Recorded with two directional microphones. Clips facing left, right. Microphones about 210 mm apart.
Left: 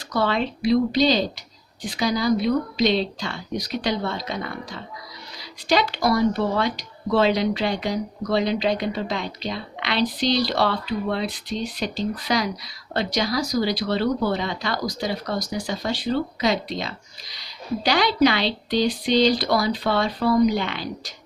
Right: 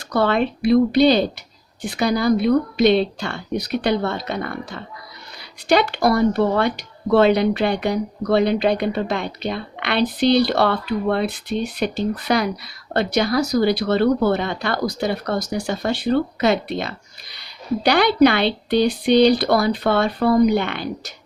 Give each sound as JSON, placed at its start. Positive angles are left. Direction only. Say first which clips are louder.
{"t": 0.1, "sound": "speech", "louder": "right 4 dB", "side_deg": -55}